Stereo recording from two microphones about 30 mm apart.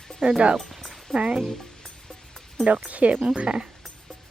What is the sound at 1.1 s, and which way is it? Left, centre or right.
Speech, left.